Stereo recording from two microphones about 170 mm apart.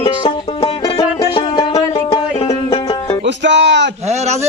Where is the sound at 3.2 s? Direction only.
90° right.